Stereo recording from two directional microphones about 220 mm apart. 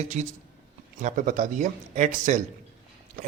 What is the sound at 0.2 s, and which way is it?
Speech, 30° right (ahead or behind).